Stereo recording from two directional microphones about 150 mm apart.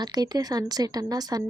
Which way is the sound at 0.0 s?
25° right (ahead or behind).